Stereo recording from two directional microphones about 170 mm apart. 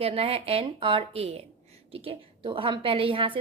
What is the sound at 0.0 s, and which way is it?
A woman's voice, 35° right (ahead or behind).